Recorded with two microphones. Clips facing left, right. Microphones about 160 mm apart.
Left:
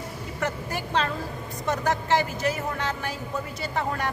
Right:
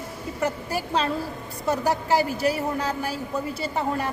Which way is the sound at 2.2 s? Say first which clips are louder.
Right 4 dB; 35° right (ahead or behind).